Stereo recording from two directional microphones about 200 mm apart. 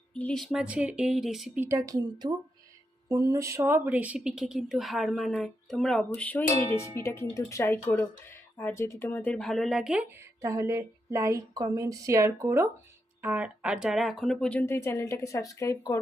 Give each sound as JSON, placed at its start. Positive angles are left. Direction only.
{"t": 0.1, "sound": "speech", "side_deg": 5}
{"t": 1.6, "sound": "a woman's voice", "side_deg": -15}
{"t": 10.4, "sound": "a woman's voice", "side_deg": -15}